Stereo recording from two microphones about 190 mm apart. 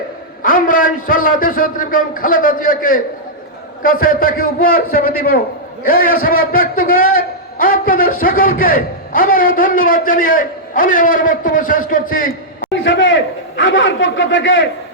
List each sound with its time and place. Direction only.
0.4 s a man's voice: 45° left (ahead or behind)
12.8 s a man's voice: 80° left